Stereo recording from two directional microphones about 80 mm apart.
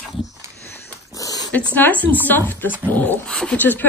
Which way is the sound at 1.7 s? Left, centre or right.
Left.